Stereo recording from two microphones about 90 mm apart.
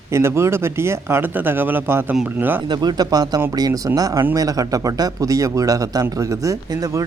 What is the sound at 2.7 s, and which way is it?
Speech, 50° right (ahead or behind).